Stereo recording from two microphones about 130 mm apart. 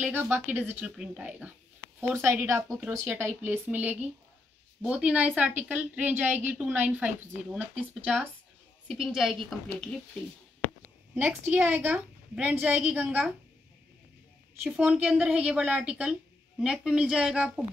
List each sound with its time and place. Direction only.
0.0 s a woman's voice: 15° right (ahead or behind)
2.0 s a woman's voice: 20° right (ahead or behind); by 10.0 s 5° left (ahead or behind)
10.8 s a sound: 15° right (ahead or behind)
11.5 s a woman's voice: 15° right (ahead or behind)
14.7 s a woman's voice: 5° right (ahead or behind)